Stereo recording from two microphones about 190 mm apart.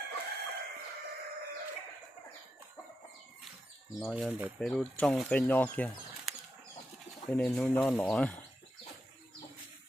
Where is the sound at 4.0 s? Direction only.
Centre (ahead or behind).